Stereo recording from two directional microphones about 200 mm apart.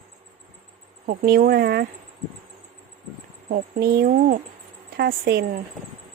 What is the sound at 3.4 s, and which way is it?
Speech, 45° right (ahead or behind).